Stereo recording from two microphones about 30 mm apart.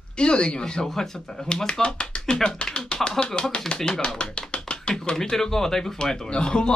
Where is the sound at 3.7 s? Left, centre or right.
Centre.